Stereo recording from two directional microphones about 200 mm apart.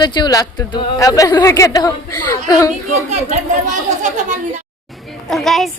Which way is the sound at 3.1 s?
35° right (ahead or behind).